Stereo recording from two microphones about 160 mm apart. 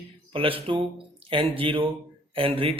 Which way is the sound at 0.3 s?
35° right (ahead or behind).